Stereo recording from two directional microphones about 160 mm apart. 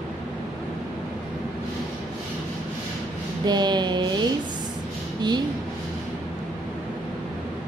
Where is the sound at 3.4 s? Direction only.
25° right (ahead or behind).